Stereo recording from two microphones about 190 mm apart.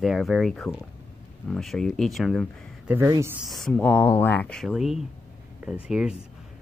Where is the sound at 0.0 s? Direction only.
Centre (ahead or behind).